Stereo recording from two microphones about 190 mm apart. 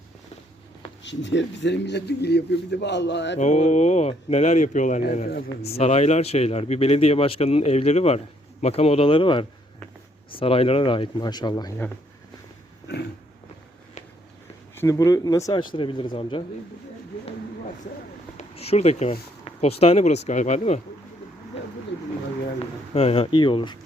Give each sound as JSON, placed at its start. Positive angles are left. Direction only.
{"t": 1.0, "sound": "a man's voice", "side_deg": 70}
{"t": 3.3, "sound": "speech", "side_deg": 40}
{"t": 12.9, "sound": "a man's voice", "side_deg": 65}
{"t": 14.8, "sound": "speech", "side_deg": 15}
{"t": 18.3, "sound": "speech", "side_deg": 30}
{"t": 23.0, "sound": "speech", "side_deg": 30}